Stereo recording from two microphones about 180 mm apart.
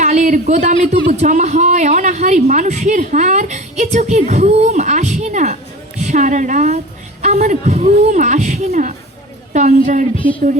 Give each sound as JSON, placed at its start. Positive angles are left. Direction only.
{"t": 0.0, "sound": "a woman's voice", "side_deg": -40}